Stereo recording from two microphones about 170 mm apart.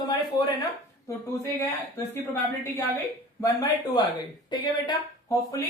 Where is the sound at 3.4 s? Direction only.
20° left (ahead or behind).